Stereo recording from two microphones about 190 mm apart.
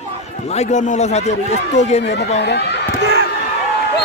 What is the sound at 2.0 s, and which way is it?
Speech, 65° left (ahead or behind).